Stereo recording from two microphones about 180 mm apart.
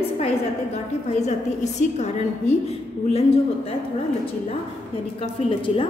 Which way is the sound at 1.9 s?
40° left (ahead or behind).